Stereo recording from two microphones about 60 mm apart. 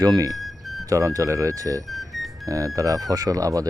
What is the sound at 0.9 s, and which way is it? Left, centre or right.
Speech, right.